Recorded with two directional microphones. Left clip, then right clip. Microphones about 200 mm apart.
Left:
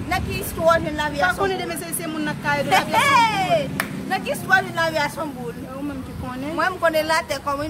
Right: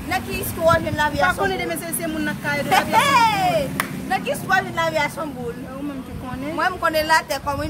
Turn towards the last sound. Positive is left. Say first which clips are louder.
# right 1 dB
turn(degrees=-15)  # may be behind; listen again after turning